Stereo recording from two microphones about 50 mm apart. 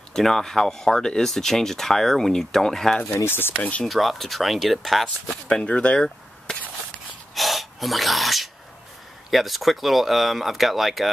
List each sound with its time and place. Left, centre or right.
0.1 s speech: centre
3.3 s speech: left
3.5 s speech: left
3.8 s speech: centre
5.0 s speech: centre
5.9 s chop: centre
7.3 s speech: centre